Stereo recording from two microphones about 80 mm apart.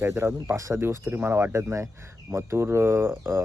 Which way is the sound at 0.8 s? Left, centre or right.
Right.